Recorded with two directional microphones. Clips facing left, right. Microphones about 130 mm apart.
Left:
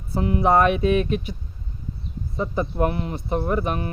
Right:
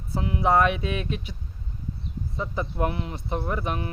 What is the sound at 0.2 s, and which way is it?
Speech, 50° left (ahead or behind).